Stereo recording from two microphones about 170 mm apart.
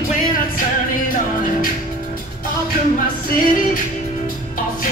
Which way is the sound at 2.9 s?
55° left (ahead or behind).